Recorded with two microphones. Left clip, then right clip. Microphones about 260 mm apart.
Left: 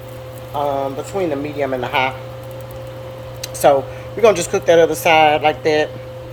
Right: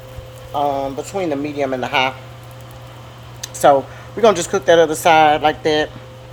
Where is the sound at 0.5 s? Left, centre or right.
Right.